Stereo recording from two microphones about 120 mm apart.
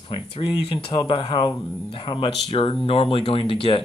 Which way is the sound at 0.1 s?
50° left (ahead or behind).